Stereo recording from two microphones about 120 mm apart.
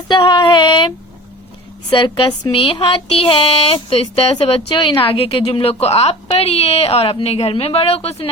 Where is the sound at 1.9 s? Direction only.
45° left (ahead or behind).